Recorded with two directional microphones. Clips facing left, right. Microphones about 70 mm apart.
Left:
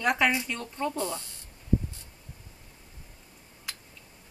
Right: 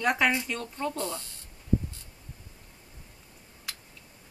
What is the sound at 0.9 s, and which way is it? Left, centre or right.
Speech, centre.